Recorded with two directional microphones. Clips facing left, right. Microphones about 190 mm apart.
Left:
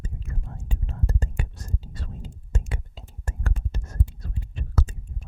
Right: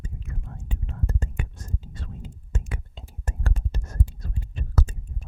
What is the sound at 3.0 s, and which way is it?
Whispering, 5° left (ahead or behind).